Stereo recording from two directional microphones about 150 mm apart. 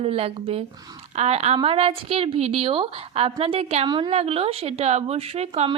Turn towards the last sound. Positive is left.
turn(degrees=-45)  # may be behind; listen again after turning